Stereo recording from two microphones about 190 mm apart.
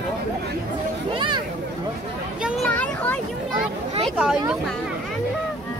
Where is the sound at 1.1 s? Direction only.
25° right (ahead or behind).